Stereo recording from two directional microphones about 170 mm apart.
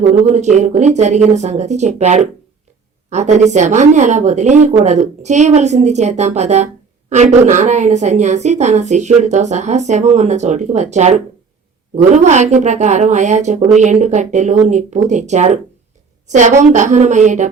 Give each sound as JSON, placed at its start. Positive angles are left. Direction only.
{"t": 0.0, "sound": "speech", "side_deg": 0}
{"t": 0.3, "sound": "a woman's voice", "side_deg": -45}